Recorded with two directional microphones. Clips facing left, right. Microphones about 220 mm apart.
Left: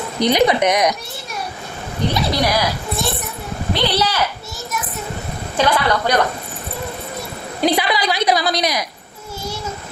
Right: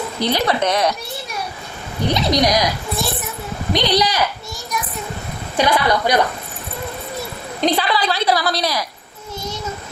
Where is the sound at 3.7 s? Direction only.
15° right (ahead or behind).